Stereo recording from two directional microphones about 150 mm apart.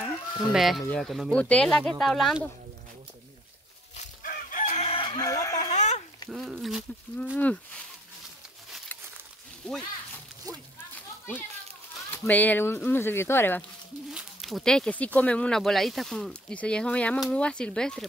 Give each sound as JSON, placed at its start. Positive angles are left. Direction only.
{"t": 0.0, "sound": "chicken", "side_deg": 0}
{"t": 0.8, "sound": "speech", "side_deg": 5}
{"t": 4.2, "sound": "chicken", "side_deg": 65}
{"t": 5.6, "sound": "a sound", "side_deg": 50}
{"t": 6.3, "sound": "speech", "side_deg": 0}
{"t": 7.3, "sound": "speech", "side_deg": 10}
{"t": 9.6, "sound": "speech", "side_deg": 5}
{"t": 12.1, "sound": "speech", "side_deg": 10}
{"t": 14.1, "sound": "a sound", "side_deg": 0}
{"t": 15.1, "sound": "speech", "side_deg": 10}